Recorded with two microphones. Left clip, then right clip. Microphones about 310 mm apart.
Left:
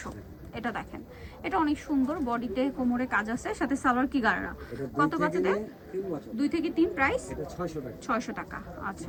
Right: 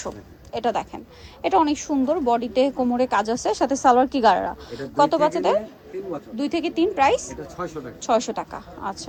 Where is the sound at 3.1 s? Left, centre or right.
Centre.